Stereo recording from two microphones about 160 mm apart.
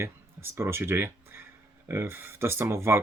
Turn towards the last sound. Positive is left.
turn(degrees=-15)  # may be behind; listen again after turning